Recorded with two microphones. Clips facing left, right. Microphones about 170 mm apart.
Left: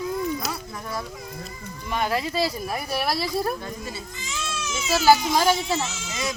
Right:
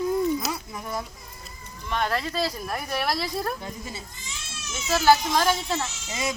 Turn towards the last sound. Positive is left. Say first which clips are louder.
# even
turn(degrees=-25)  # may be behind; listen again after turning